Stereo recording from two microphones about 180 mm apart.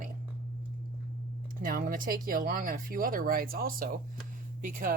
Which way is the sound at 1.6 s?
50° right (ahead or behind).